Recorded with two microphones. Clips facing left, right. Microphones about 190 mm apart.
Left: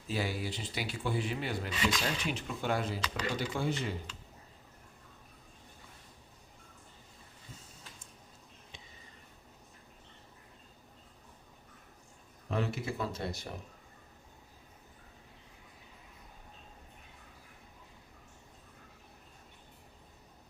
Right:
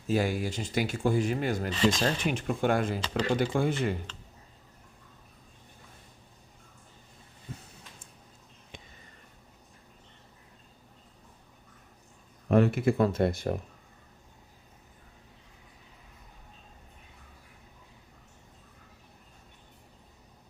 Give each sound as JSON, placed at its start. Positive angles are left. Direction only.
{"t": 0.1, "sound": "speech", "side_deg": -50}
{"t": 12.5, "sound": "speech", "side_deg": -55}